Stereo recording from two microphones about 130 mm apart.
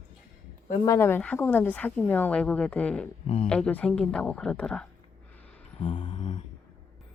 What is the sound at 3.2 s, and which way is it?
Speech, 55° left (ahead or behind).